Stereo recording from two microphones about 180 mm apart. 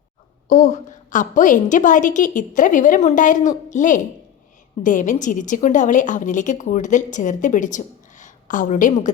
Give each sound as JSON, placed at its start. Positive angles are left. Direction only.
{"t": 0.4, "sound": "a woman's voice", "side_deg": 45}